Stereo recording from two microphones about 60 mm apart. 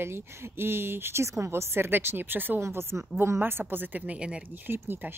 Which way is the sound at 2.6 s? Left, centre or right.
Right.